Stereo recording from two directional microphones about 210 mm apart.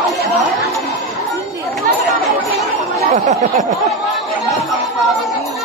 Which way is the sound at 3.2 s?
35° right (ahead or behind).